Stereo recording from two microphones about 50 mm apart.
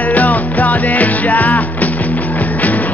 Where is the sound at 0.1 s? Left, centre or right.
Left.